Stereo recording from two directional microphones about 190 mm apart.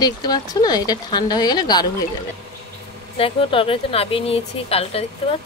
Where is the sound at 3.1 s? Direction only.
30° left (ahead or behind).